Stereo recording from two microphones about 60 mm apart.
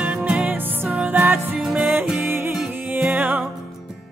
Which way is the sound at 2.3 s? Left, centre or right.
Right.